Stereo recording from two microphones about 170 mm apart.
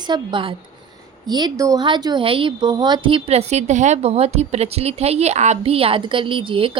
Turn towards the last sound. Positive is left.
turn(degrees=-30)  # may be behind; listen again after turning